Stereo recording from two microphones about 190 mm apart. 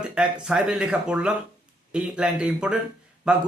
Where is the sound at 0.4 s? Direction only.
5° right (ahead or behind).